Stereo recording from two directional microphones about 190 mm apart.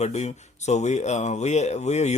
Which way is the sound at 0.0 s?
35° left (ahead or behind).